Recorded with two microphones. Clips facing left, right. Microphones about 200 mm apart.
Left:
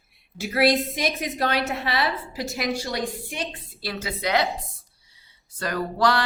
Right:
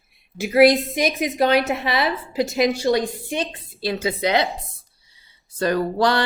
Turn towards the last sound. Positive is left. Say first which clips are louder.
# right 3 dB
turn(degrees=-25)  # may be behind; listen again after turning